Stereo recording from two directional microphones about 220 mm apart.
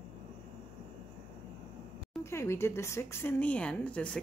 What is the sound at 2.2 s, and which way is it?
Speech, 10° left (ahead or behind).